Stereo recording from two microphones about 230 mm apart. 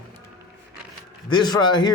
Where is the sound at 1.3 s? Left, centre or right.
Centre.